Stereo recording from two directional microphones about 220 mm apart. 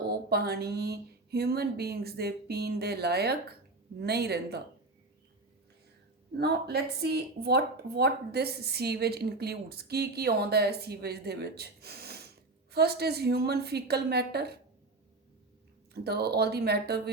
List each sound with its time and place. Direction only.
0.1 s speech: 45° right (ahead or behind)
6.3 s speech: 50° right (ahead or behind)
15.9 s speech: 45° right (ahead or behind)